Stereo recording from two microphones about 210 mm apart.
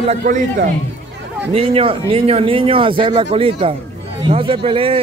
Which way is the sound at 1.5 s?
25° right (ahead or behind).